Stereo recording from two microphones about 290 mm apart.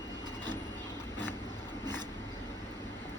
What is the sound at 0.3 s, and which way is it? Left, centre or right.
Vehicle, centre.